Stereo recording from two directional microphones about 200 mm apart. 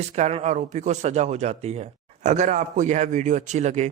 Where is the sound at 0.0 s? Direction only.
35° right (ahead or behind).